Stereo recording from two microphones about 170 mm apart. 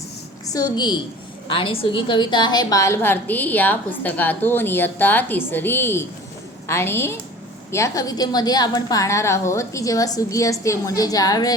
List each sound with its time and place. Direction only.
0.4 s a woman's voice: 20° left (ahead or behind)